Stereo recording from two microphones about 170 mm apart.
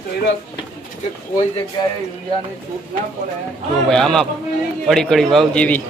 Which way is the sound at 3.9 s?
5° left (ahead or behind).